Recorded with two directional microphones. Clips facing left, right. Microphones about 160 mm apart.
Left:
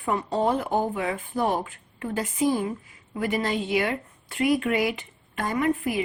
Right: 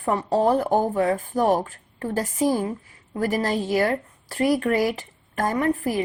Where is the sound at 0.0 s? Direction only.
35° right (ahead or behind).